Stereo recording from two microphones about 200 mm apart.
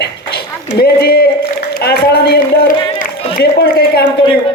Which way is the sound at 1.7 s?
50° left (ahead or behind).